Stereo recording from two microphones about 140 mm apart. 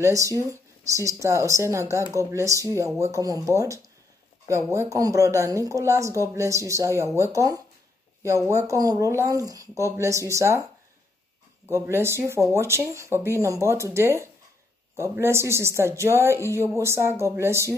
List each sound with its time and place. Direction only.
0.0 s speech: 25° right (ahead or behind)
11.6 s speech: 15° right (ahead or behind)